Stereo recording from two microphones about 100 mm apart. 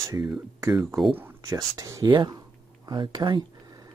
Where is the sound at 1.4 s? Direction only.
35° right (ahead or behind).